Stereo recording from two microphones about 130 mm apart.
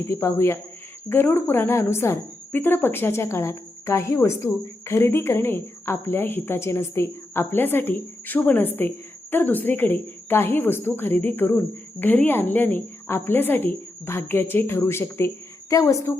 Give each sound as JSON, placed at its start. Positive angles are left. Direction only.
{"t": 0.1, "sound": "a woman's voice", "side_deg": 20}